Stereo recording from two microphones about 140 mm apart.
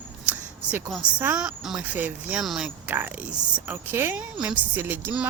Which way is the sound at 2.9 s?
15° right (ahead or behind).